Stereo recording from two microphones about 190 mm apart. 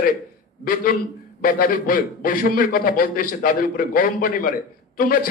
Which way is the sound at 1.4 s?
45° left (ahead or behind).